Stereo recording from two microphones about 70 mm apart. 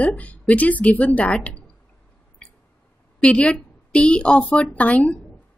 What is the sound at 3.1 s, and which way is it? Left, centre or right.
A woman's voice, centre.